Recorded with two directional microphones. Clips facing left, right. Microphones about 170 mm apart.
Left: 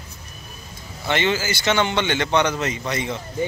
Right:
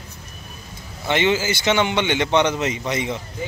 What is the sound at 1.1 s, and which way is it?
A man's voice, 20° right (ahead or behind).